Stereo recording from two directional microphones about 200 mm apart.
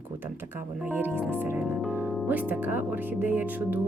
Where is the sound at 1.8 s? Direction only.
10° right (ahead or behind).